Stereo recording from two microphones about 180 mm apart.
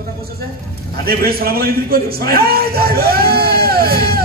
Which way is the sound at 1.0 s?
55° right (ahead or behind).